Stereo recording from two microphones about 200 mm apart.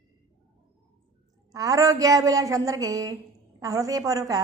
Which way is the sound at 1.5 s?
15° right (ahead or behind).